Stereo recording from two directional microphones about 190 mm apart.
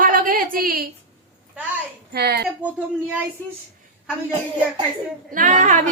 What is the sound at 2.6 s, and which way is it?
Speech, 10° right (ahead or behind).